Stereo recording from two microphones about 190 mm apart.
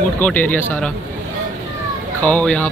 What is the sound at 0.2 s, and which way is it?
Speech, 10° left (ahead or behind).